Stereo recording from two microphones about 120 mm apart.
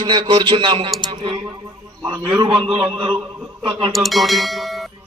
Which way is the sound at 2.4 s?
40° right (ahead or behind).